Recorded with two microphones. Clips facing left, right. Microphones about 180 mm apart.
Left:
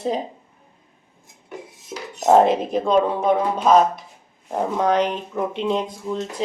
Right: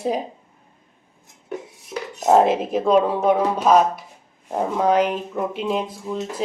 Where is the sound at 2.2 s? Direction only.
5° right (ahead or behind).